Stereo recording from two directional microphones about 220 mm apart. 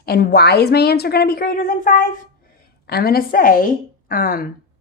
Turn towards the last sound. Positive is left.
turn(degrees=40)  # may be behind; listen again after turning